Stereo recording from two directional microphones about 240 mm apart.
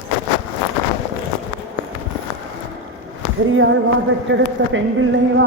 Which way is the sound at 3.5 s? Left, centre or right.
Right.